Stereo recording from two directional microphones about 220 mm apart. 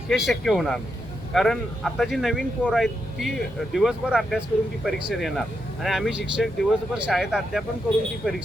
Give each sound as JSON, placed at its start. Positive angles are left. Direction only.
{"t": 0.1, "sound": "speech", "side_deg": 0}